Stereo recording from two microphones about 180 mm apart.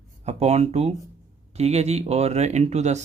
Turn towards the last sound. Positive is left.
turn(degrees=-40)  # may be behind; listen again after turning